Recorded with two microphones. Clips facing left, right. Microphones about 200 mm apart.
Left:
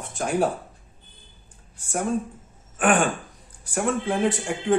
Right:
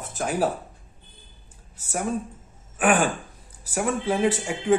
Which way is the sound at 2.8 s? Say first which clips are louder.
Even; 5° right (ahead or behind).